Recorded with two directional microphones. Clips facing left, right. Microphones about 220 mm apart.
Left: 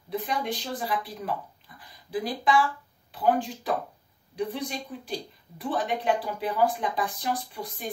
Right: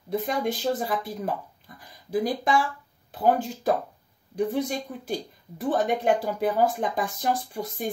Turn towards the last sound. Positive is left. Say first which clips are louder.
# right 5 dB
turn(degrees=-45)  # may be behind; listen again after turning